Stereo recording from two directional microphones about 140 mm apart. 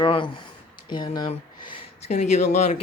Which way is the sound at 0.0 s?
35° left (ahead or behind).